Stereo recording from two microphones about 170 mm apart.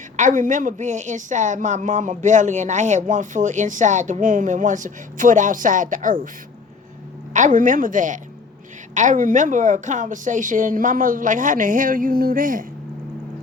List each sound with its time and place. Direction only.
0.2 s a woman's voice: 50° right (ahead or behind)
7.3 s a woman's voice: 50° right (ahead or behind)